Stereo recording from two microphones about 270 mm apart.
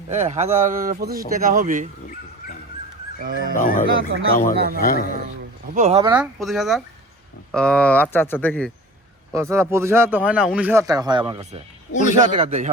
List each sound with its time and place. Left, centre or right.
0.1 s speech: right
3.2 s speech: right
3.5 s speech: left
4.5 s speech: right
4.8 s speech: left
5.7 s speech: right
6.0 s a man's voice: centre
6.4 s speech: centre
9.3 s a man's voice: centre; by 12.7 s right